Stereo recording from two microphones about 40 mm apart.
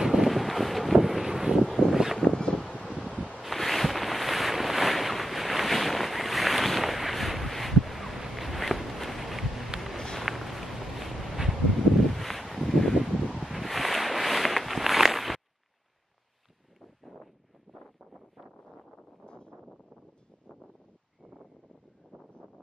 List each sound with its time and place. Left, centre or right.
0.0 s vehicle: centre
1.9 s a sound: centre
2.3 s wind: left
3.4 s boat: centre
8.2 s a sound: centre
12.1 s wind: centre
13.4 s walk: centre